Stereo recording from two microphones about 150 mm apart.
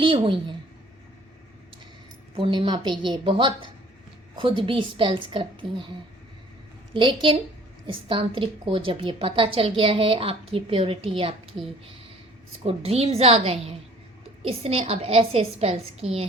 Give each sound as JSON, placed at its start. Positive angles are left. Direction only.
{"t": 0.0, "sound": "a woman's voice", "side_deg": -35}
{"t": 2.3, "sound": "a woman's voice", "side_deg": -35}
{"t": 6.9, "sound": "a woman's voice", "side_deg": -35}
{"t": 12.6, "sound": "a woman's voice", "side_deg": -40}